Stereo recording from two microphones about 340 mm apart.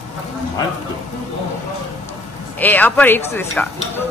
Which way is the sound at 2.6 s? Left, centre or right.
Centre.